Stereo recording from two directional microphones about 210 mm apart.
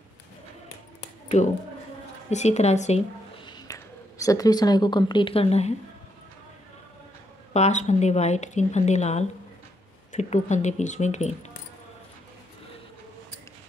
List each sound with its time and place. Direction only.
2.3 s speech: 30° left (ahead or behind)
3.4 s speech: 20° left (ahead or behind)
7.5 s speech: 30° left (ahead or behind)